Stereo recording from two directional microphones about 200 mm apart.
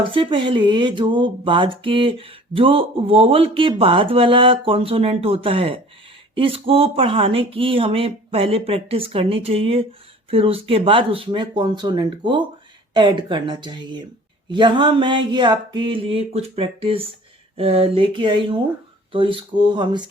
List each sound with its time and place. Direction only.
0.0 s speech: 25° right (ahead or behind)